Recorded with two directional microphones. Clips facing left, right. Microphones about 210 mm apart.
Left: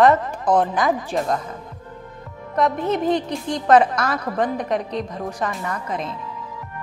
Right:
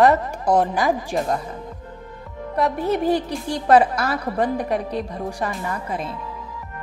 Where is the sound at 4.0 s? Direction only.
30° right (ahead or behind).